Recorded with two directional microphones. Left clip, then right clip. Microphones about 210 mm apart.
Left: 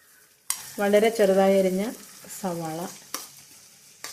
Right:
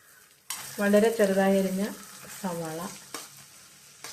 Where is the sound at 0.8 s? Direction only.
40° left (ahead or behind).